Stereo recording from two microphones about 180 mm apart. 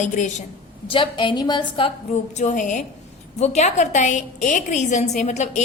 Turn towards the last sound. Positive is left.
turn(degrees=40)  # may be behind; listen again after turning